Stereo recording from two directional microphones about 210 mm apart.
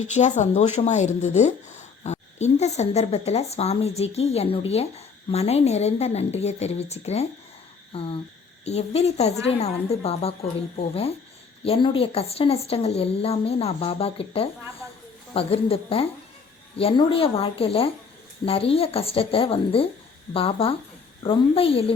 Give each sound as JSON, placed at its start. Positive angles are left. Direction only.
{"t": 0.1, "sound": "a woman's voice", "side_deg": 35}